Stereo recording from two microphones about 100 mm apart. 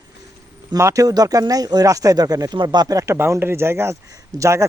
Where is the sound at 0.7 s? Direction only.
30° right (ahead or behind).